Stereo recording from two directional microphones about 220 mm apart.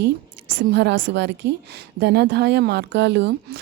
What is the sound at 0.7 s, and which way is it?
Speech, 50° right (ahead or behind).